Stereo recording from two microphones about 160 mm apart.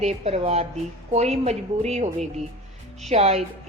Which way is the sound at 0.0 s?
40° right (ahead or behind).